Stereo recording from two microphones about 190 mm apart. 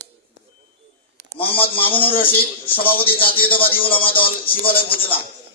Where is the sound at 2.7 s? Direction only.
50° left (ahead or behind).